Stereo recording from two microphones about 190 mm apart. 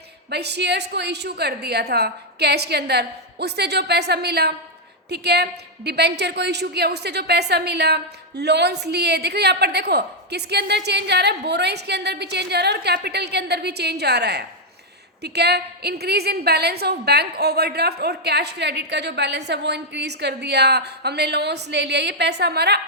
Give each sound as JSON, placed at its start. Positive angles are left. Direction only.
{"t": 0.3, "sound": "a woman's voice", "side_deg": -60}